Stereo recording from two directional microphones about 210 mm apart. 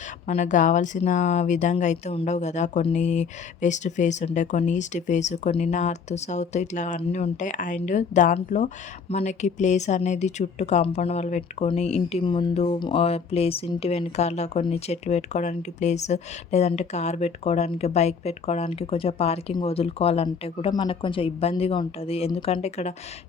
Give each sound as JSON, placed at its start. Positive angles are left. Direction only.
{"t": 0.3, "sound": "speech", "side_deg": 35}